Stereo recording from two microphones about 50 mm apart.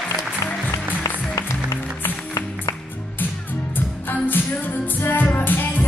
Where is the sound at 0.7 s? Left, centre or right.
Left.